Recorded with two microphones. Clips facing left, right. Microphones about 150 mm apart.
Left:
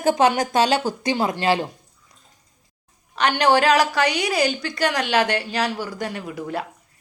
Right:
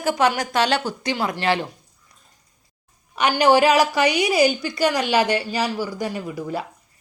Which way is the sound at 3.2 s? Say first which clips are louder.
Right 2 dB; 5° right (ahead or behind).